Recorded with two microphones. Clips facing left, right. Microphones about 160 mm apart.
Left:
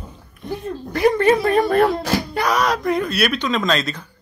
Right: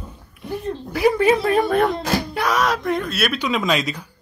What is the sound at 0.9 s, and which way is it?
Speech, 5° right (ahead or behind).